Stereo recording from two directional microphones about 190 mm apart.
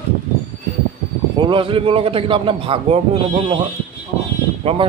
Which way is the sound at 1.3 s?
25° right (ahead or behind).